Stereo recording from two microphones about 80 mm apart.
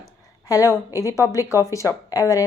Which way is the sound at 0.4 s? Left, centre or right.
Left.